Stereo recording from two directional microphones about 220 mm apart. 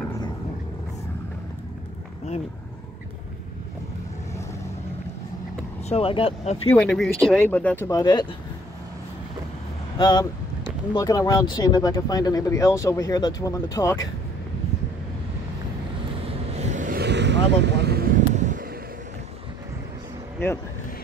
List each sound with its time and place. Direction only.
5.9 s speech: 25° left (ahead or behind)
6.7 s speech: 5° left (ahead or behind)
9.9 s speech: 20° left (ahead or behind)
16.5 s vehicle: 30° right (ahead or behind)